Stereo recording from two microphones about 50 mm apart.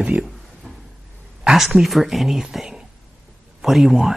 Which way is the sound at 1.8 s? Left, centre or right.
Centre.